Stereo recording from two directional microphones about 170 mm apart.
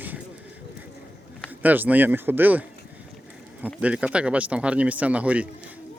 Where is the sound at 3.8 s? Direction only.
5° right (ahead or behind).